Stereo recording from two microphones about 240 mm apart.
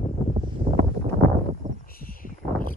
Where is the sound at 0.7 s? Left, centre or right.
Right.